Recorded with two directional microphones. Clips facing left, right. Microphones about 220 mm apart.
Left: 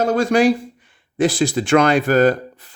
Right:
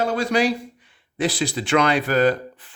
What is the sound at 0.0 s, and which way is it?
Speech, 45° left (ahead or behind).